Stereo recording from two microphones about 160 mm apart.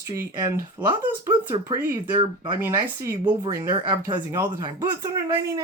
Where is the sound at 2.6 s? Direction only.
20° right (ahead or behind).